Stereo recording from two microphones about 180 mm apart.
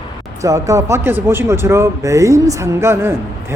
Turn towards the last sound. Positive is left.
turn(degrees=-15)  # may be behind; listen again after turning